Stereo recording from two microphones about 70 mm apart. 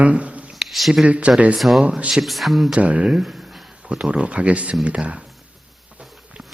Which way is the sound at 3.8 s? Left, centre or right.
Centre.